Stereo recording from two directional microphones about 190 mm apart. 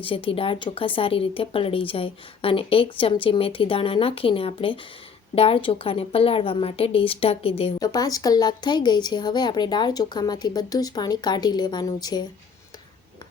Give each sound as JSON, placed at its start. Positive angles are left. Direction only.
{"t": 0.0, "sound": "a woman's voice", "side_deg": 30}
{"t": 7.8, "sound": "a woman's voice", "side_deg": 20}